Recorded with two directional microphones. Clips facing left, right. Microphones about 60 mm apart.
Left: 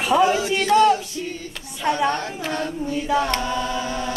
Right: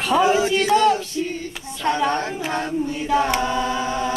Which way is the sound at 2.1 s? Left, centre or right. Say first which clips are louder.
Right 1 dB; right.